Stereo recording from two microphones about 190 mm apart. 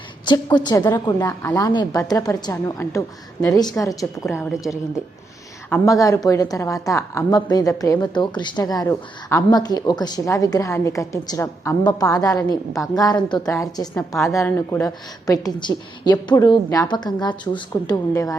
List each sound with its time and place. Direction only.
0.3 s a woman's voice: 20° left (ahead or behind)
4.2 s a woman's voice: centre (ahead or behind)
5.7 s a woman's voice: 15° left (ahead or behind)